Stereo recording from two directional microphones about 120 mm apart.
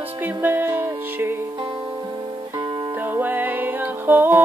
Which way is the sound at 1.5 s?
45° right (ahead or behind).